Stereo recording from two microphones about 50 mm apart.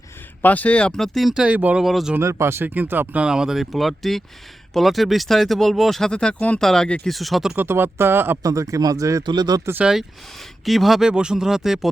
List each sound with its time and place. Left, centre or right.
0.4 s speech: left
0.8 s speech: centre
1.3 s speech: centre
1.8 s speech: centre
2.2 s speech: right
2.6 s speech: right
3.2 s speech: centre
3.6 s speech: centre
6.0 s speech: centre
6.6 s speech: centre
7.5 s speech: right
8.4 s speech: right
9.8 s speech: centre
11.1 s speech: centre